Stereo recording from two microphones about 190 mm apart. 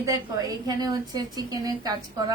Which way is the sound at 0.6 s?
20° right (ahead or behind).